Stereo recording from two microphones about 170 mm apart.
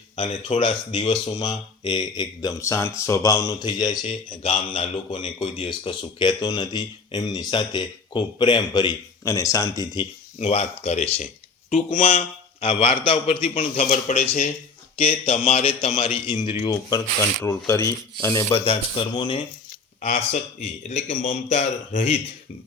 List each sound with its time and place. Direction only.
0.2 s speech: 30° left (ahead or behind)
10.3 s speech: 40° left (ahead or behind)
13.6 s speech: 45° left (ahead or behind)
16.1 s speech: 25° left (ahead or behind)
18.5 s speech: 35° left (ahead or behind)
20.0 s speech: 40° left (ahead or behind)